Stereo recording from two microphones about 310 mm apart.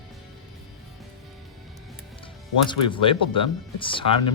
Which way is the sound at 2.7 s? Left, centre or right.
Centre.